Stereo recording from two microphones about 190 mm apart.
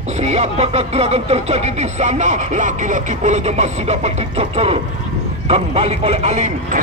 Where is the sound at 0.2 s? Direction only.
35° right (ahead or behind).